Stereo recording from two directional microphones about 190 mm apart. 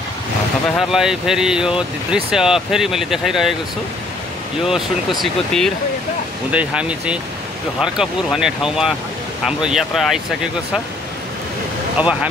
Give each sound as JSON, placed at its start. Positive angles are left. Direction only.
{"t": 0.7, "sound": "speech", "side_deg": -5}
{"t": 5.2, "sound": "speech", "side_deg": 0}
{"t": 12.0, "sound": "speech", "side_deg": -5}